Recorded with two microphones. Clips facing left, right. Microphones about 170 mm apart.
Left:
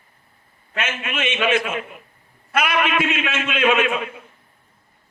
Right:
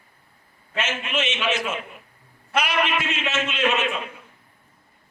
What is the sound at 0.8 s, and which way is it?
A man's voice, 55° left (ahead or behind).